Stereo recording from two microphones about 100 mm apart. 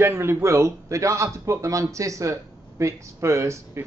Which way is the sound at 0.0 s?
25° right (ahead or behind).